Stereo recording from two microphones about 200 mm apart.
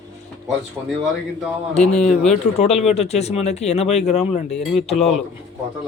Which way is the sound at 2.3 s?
35° left (ahead or behind).